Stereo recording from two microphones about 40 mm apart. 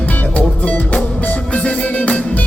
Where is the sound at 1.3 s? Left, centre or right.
Left.